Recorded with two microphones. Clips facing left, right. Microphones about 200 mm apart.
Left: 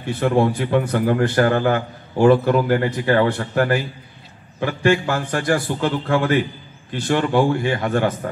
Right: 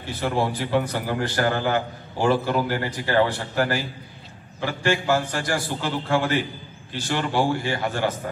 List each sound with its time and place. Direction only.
0.1 s a man's voice: 55° left (ahead or behind)